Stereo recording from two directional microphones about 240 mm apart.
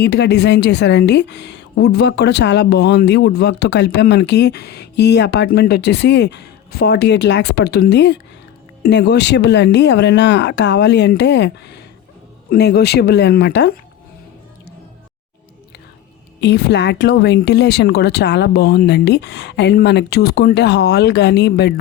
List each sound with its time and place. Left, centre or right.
0.0 s a woman's voice: left
16.4 s a woman's voice: left